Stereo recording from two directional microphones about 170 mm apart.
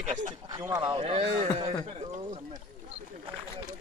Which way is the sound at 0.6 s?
15° right (ahead or behind).